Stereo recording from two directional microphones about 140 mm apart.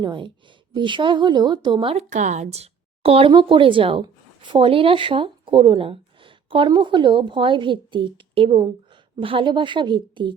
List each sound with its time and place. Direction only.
0.0 s speech: 35° right (ahead or behind)
2.0 s speech: 60° right (ahead or behind); by 10.3 s 35° right (ahead or behind)